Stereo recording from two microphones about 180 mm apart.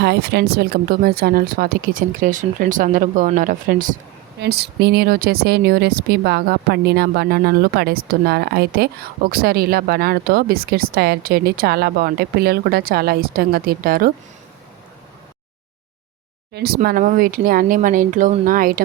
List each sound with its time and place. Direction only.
0.0 s speech: 65° right (ahead or behind); by 3.9 s 50° right (ahead or behind)
4.4 s a woman's voice: 65° right (ahead or behind)
16.6 s speech: 60° right (ahead or behind)